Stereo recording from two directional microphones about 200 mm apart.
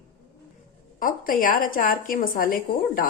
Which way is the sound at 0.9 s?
45° left (ahead or behind).